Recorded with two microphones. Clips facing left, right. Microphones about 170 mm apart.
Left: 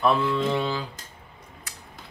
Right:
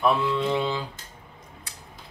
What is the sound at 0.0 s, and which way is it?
Speech, 15° right (ahead or behind).